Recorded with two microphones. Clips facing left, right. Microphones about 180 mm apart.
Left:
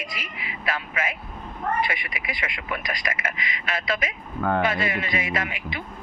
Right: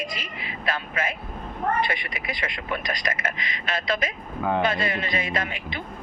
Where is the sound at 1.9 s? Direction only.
20° left (ahead or behind).